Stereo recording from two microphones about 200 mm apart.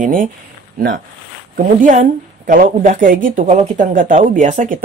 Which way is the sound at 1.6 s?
40° right (ahead or behind).